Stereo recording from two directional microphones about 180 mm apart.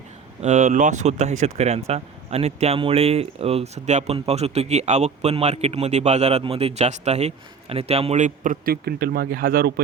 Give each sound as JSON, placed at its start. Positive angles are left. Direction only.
{"t": 0.4, "sound": "speech", "side_deg": -40}